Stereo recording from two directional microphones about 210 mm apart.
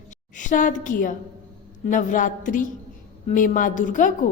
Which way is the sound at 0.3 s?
40° left (ahead or behind).